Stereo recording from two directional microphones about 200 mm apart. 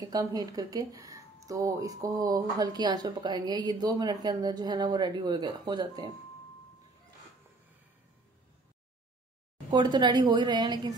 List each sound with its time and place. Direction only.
0.0 s speech: 20° right (ahead or behind)
9.7 s speech: 20° right (ahead or behind)